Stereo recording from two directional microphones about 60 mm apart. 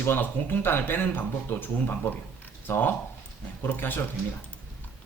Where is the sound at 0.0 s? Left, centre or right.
Left.